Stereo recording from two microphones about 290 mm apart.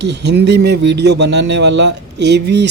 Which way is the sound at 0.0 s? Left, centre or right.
Right.